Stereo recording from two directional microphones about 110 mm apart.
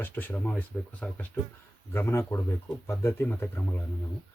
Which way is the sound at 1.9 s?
25° left (ahead or behind).